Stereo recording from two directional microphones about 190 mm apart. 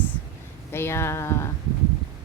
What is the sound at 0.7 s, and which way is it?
Speech, 15° left (ahead or behind).